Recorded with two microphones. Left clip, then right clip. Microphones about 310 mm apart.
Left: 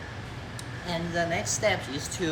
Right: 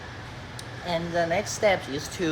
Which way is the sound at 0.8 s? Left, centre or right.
Right.